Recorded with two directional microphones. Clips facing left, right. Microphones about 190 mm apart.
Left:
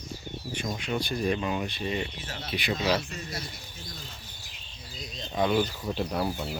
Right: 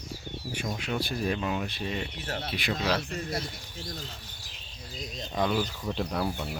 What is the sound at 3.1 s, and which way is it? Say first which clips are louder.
Speech: right 5 dB; 55° right (ahead or behind).